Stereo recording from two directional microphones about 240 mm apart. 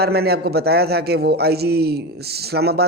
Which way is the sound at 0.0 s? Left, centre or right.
Right.